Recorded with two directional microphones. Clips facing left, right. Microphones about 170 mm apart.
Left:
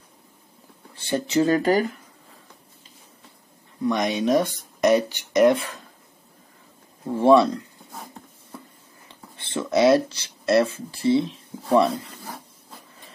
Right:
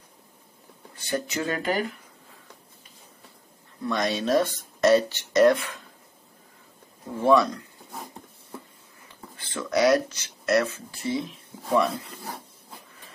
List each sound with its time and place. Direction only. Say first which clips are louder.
0.9 s speech: left 7 dB; 25° left (ahead or behind)
3.8 s speech: left 4 dB; 15° left (ahead or behind)
7.2 s speech: left 4 dB; 30° left (ahead or behind)
9.4 s speech: left 3 dB; 25° left (ahead or behind)